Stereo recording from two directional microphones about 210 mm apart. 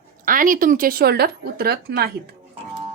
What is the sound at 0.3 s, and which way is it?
A woman's voice, 40° right (ahead or behind).